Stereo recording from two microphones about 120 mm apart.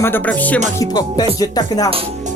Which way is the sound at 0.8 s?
35° left (ahead or behind).